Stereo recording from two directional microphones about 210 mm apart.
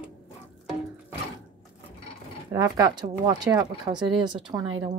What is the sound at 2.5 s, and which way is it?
Speech, 15° right (ahead or behind).